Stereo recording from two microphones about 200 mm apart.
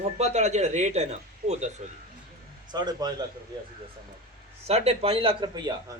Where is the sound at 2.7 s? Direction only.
20° right (ahead or behind).